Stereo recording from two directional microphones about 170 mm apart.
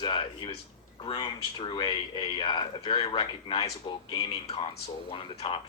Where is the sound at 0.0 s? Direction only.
25° left (ahead or behind).